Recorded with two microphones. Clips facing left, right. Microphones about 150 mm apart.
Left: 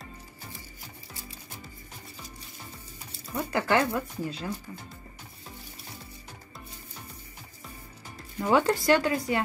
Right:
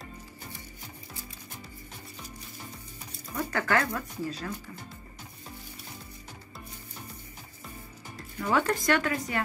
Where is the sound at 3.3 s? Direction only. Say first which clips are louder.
Left 2 dB; 20° left (ahead or behind).